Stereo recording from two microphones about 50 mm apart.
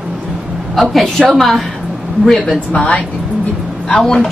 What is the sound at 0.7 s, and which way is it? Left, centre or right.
Speech, centre.